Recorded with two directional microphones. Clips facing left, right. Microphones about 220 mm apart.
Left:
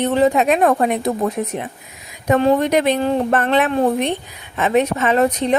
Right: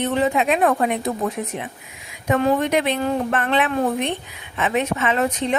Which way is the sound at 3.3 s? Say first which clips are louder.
Left 5 dB; 40° left (ahead or behind).